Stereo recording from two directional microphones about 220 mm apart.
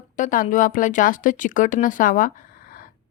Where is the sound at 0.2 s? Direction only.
35° left (ahead or behind).